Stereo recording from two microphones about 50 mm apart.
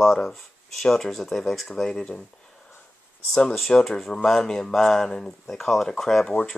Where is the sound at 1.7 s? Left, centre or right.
Centre.